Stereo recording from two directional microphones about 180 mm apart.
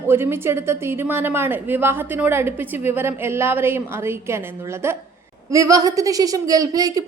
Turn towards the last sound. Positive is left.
turn(degrees=-20)  # may be behind; listen again after turning